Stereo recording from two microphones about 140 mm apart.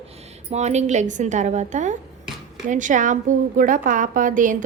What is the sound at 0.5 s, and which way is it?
A woman's voice, 55° right (ahead or behind).